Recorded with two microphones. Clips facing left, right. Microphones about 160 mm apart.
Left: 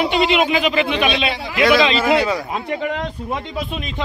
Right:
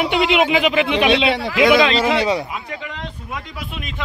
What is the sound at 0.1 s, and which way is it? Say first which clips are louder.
Speech: even; 10° right (ahead or behind).